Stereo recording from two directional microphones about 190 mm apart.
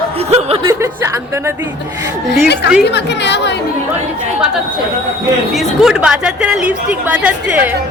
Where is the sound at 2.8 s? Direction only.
65° left (ahead or behind).